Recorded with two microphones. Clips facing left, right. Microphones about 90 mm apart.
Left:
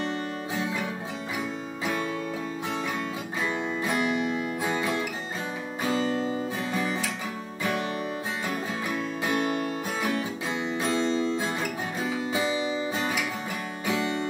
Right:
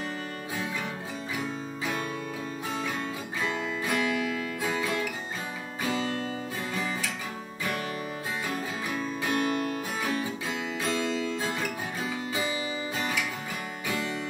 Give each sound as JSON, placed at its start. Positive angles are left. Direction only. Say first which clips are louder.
{"t": 3.5, "sound": "music", "louder": "left 2 dB", "side_deg": 25}
{"t": 9.2, "sound": "music", "louder": "left 1 dB", "side_deg": 20}
{"t": 10.8, "sound": "music", "louder": "left 4 dB", "side_deg": 25}